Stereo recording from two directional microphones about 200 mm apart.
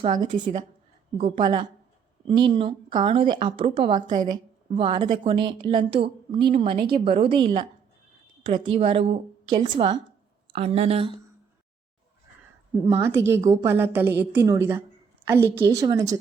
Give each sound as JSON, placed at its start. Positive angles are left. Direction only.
{"t": 0.2, "sound": "a woman's voice", "side_deg": -25}
{"t": 12.8, "sound": "a woman's voice", "side_deg": -10}